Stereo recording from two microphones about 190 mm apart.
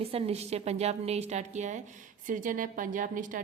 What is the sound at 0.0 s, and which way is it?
A woman's voice, 30° right (ahead or behind).